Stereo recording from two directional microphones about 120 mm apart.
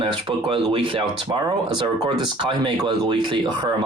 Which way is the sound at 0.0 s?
45° right (ahead or behind).